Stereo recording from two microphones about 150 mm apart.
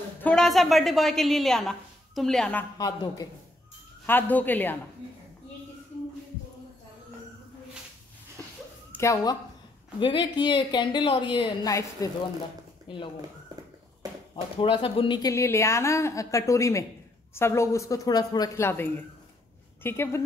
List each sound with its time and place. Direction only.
0.2 s a woman's voice: 5° left (ahead or behind)
2.8 s a woman's voice: 25° left (ahead or behind)
4.0 s speech: 10° left (ahead or behind)
8.9 s speech: 20° left (ahead or behind)
14.3 s speech: 35° left (ahead or behind)
15.2 s a woman's voice: 20° left (ahead or behind)